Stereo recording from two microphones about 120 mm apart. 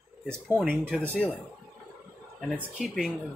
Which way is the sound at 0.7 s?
15° right (ahead or behind).